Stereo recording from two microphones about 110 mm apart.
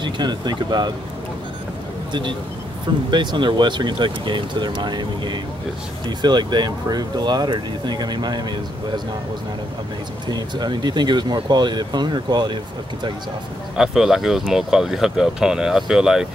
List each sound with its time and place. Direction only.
0.0 s speech: 40° right (ahead or behind)
3.1 s speech: 45° right (ahead or behind)
10.2 s speech: 40° right (ahead or behind)
13.7 s speech: 5° right (ahead or behind)